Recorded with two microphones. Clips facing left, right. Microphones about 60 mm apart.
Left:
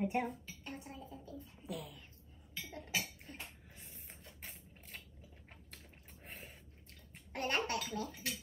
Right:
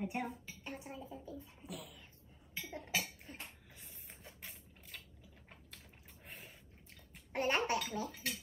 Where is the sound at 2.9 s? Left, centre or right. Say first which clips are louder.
Right 1 dB; centre.